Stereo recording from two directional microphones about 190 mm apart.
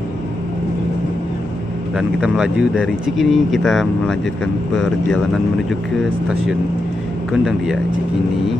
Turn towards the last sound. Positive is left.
turn(degrees=0)  # may be behind; listen again after turning